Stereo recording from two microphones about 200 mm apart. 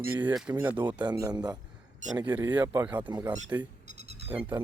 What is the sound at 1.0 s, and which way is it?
Speech, 20° right (ahead or behind).